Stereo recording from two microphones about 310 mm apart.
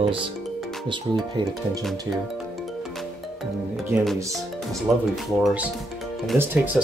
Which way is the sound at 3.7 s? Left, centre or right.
Centre.